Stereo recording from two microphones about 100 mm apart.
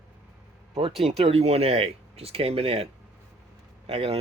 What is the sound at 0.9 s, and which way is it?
Speech, centre (ahead or behind).